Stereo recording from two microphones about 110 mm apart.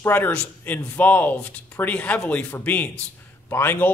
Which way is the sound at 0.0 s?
20° left (ahead or behind).